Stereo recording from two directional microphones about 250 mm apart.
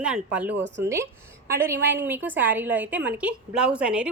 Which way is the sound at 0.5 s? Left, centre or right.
Right.